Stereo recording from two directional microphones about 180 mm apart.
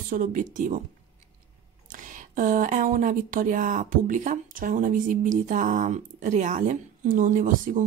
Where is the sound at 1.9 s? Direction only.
45° right (ahead or behind).